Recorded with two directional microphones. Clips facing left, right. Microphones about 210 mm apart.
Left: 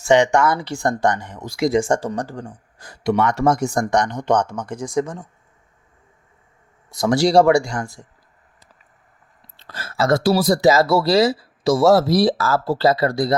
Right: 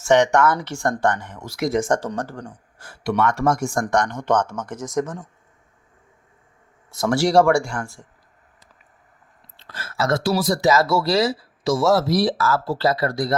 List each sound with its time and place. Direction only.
0.0 s speech: 15° left (ahead or behind)
6.9 s speech: 15° left (ahead or behind)
9.6 s speech: 35° left (ahead or behind)